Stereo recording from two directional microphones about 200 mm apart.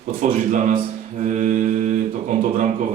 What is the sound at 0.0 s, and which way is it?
Speech, 40° right (ahead or behind).